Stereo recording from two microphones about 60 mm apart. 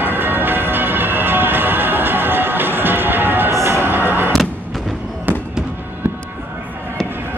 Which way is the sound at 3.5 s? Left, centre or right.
Right.